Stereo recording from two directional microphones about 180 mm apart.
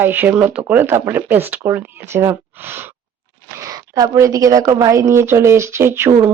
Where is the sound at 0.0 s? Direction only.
10° right (ahead or behind).